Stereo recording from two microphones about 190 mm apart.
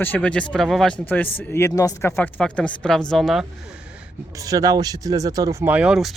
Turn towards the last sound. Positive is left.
turn(degrees=-5)  # may be behind; listen again after turning